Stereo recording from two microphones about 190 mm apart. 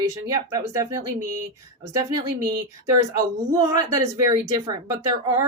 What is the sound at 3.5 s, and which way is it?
Speech, 15° right (ahead or behind).